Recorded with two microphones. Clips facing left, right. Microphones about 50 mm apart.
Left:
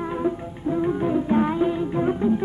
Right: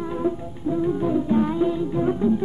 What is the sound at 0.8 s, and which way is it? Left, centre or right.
Music, left.